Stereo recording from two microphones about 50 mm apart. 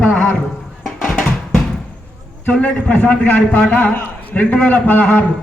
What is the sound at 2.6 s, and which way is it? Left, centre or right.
A man's voice, left.